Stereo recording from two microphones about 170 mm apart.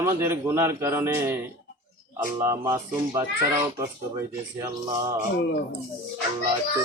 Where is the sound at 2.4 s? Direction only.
15° right (ahead or behind).